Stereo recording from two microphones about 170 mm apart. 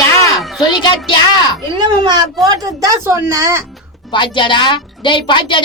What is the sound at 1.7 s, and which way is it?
Speech, 25° right (ahead or behind).